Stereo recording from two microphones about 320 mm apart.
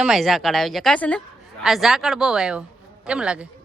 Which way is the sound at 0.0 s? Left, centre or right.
Centre.